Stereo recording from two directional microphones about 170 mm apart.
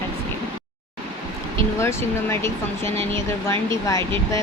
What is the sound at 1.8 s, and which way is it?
Speech, 15° left (ahead or behind).